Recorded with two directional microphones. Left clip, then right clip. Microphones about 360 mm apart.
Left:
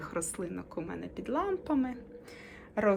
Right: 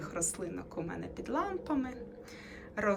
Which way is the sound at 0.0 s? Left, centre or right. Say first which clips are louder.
Left 1 dB; centre.